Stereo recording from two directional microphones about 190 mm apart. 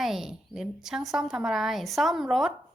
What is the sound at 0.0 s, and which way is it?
A woman's voice, centre (ahead or behind).